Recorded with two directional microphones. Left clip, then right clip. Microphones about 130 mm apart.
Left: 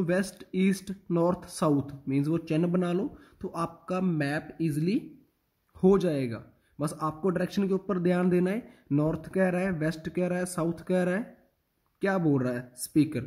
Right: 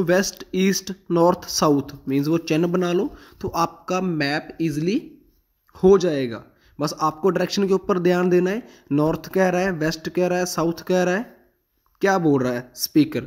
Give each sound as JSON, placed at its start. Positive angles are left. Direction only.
{"t": 0.0, "sound": "a man's voice", "side_deg": -30}